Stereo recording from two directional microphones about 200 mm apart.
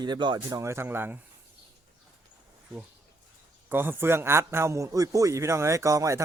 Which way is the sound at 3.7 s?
10° right (ahead or behind).